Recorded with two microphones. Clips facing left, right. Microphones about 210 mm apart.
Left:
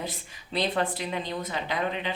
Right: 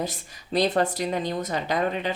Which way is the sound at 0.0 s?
45° right (ahead or behind).